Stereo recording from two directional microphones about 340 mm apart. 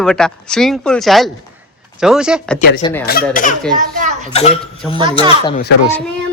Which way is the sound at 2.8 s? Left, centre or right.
Centre.